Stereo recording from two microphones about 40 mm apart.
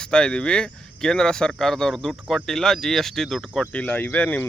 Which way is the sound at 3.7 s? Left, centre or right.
Left.